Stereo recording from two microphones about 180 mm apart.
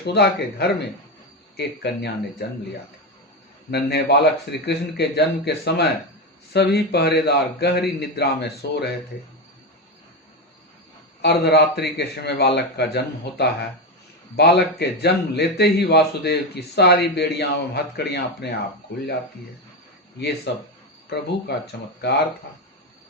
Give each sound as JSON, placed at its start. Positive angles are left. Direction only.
{"t": 0.0, "sound": "a man's voice", "side_deg": 65}
{"t": 3.7, "sound": "a man's voice", "side_deg": 65}
{"t": 11.2, "sound": "a man's voice", "side_deg": 70}
{"t": 20.1, "sound": "a man's voice", "side_deg": 65}